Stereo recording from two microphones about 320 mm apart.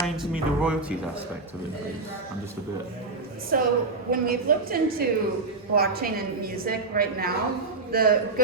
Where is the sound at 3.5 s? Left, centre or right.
Right.